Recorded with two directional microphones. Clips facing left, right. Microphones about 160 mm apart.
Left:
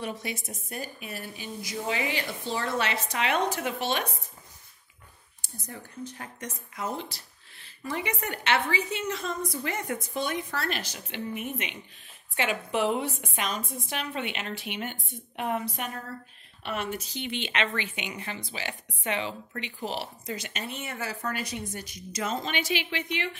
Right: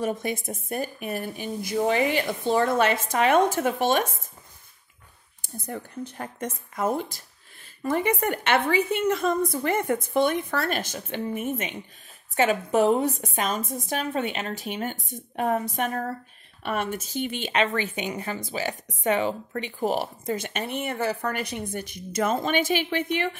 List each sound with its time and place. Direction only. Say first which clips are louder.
0.0 s speech: right 7 dB; 50° right (ahead or behind)
5.4 s a woman's voice: right 8 dB; 55° right (ahead or behind)